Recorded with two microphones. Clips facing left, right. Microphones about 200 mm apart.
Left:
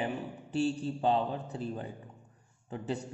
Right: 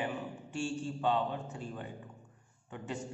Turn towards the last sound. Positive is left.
turn(degrees=35)  # may be behind; listen again after turning